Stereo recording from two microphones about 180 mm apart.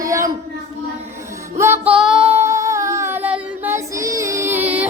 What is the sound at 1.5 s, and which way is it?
Female singing, 15° right (ahead or behind).